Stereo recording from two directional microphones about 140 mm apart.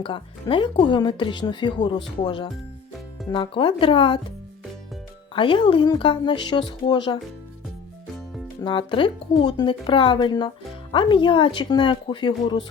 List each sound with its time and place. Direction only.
0.0 s speech: 35° left (ahead or behind)
5.3 s speech: 40° left (ahead or behind)
8.6 s speech: 35° left (ahead or behind)